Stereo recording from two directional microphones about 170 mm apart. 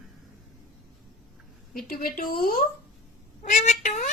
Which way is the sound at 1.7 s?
55° left (ahead or behind).